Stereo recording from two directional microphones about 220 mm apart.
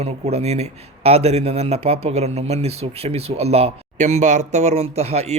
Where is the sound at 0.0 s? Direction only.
30° right (ahead or behind).